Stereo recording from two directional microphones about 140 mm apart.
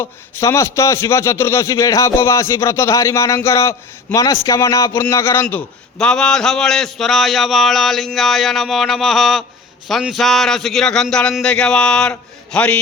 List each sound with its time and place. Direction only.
0.0 s a man's voice: 20° left (ahead or behind)